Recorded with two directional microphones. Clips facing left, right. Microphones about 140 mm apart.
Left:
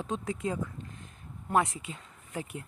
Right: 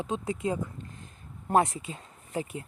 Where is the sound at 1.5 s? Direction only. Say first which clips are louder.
Right 3 dB; 35° right (ahead or behind).